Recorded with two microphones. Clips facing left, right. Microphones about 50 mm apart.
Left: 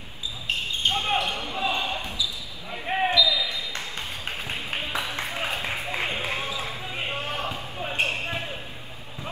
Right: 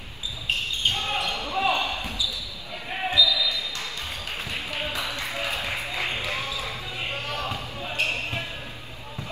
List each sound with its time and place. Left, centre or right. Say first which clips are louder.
0.9 s basketball bounce: left 2 dB; left
1.5 s basketball bounce: right 6 dB; right
2.7 s basketball bounce: left 4 dB; left
4.5 s a sound: even; left
7.2 s basketball bounce: even; left